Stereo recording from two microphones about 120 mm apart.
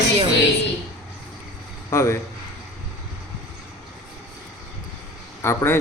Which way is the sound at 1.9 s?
25° left (ahead or behind).